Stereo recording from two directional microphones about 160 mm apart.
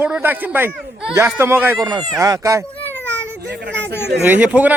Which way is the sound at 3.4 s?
90° right.